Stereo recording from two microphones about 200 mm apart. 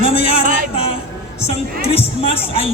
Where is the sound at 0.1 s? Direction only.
30° left (ahead or behind).